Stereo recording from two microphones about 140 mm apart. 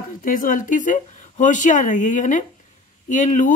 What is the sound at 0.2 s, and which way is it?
Speech, 75° left (ahead or behind).